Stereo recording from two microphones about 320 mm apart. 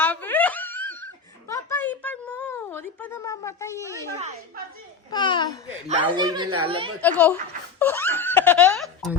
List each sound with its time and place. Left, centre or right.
0.0 s giggle: centre
4.2 s a woman's voice: right
5.1 s a child's voice: centre
5.9 s speech: centre
7.0 s speech: centre
7.8 s giggle: centre